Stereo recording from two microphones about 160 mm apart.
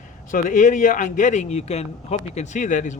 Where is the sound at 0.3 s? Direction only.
55° left (ahead or behind).